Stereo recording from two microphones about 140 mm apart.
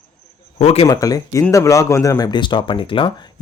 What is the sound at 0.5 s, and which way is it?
Speech, 45° left (ahead or behind).